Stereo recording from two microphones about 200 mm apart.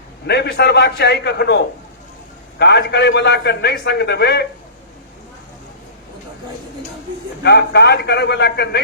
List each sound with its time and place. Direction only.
0.3 s a man's voice: 55° left (ahead or behind)
7.4 s a man's voice: 55° left (ahead or behind)